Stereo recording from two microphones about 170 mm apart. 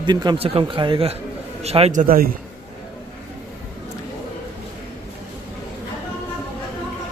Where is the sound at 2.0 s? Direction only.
60° right (ahead or behind).